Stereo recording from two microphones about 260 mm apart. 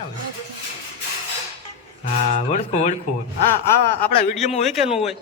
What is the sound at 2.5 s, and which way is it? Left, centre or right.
Speech, left.